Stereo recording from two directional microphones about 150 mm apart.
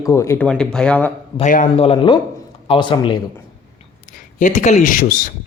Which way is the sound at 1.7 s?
40° left (ahead or behind).